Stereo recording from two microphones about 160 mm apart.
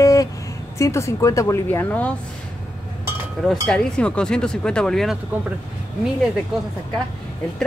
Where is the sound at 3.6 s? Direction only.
5° left (ahead or behind).